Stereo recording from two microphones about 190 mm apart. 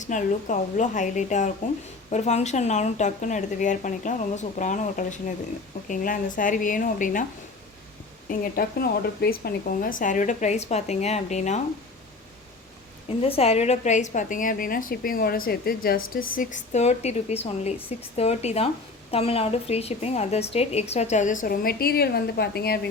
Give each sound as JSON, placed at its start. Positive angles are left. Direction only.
{"t": 0.0, "sound": "a woman's voice", "side_deg": 40}
{"t": 8.3, "sound": "a woman's voice", "side_deg": 50}
{"t": 13.1, "sound": "a woman's voice", "side_deg": 30}